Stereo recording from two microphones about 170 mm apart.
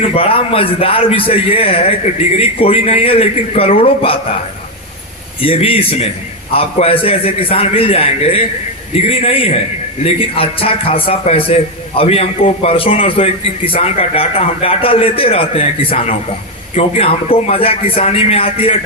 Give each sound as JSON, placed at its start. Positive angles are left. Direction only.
{"t": 0.0, "sound": "a man's voice", "side_deg": 35}
{"t": 5.4, "sound": "a man's voice", "side_deg": 35}